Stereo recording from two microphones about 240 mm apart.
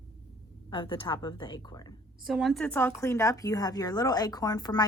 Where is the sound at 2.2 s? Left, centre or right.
Centre.